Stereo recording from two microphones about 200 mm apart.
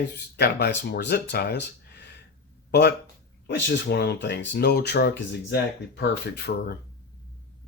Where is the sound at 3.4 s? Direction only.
60° left (ahead or behind).